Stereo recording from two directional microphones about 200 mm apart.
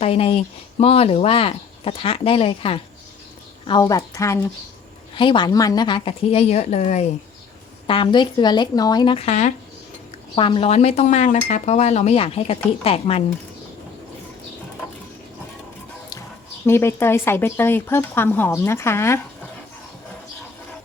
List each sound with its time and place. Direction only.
0.0 s speech: 30° left (ahead or behind)
16.6 s speech: 10° left (ahead or behind)